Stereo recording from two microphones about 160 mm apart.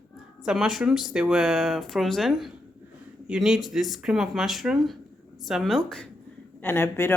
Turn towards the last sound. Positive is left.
turn(degrees=15)  # may be behind; listen again after turning